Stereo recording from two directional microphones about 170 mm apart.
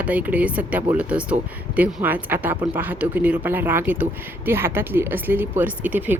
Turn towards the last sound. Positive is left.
turn(degrees=-10)  # may be behind; listen again after turning